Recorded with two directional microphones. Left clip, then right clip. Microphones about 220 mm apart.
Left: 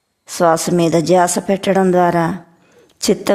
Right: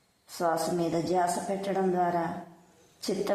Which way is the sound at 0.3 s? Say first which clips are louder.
Left 14 dB; 45° left (ahead or behind).